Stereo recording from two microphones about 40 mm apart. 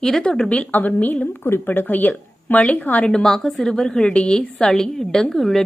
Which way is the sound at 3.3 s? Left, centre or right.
Centre.